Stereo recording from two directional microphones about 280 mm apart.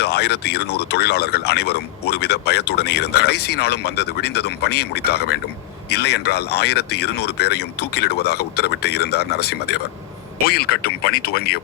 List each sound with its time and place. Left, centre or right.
0.0 s speech: left